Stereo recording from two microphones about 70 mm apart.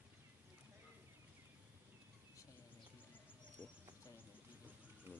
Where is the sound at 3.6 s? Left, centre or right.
Left.